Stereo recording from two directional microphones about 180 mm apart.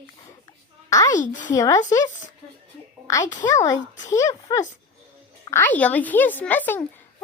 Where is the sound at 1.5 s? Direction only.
20° left (ahead or behind).